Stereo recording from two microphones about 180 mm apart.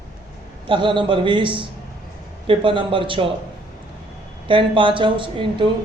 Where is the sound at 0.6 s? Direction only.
30° right (ahead or behind).